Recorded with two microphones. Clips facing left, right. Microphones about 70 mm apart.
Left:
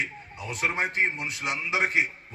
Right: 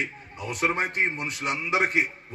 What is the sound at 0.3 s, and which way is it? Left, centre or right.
Speech, right.